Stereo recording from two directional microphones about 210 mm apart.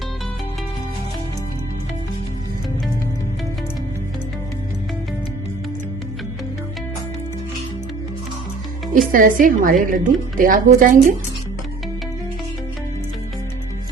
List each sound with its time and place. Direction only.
8.9 s a woman's voice: 40° right (ahead or behind)